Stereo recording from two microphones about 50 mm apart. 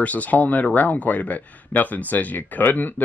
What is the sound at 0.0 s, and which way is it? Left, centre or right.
Speech, left.